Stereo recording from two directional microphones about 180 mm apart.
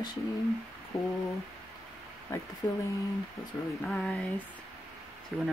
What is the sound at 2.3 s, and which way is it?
Speech, 15° left (ahead or behind).